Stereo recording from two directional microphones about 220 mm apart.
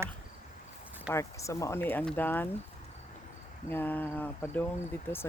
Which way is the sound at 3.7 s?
10° left (ahead or behind).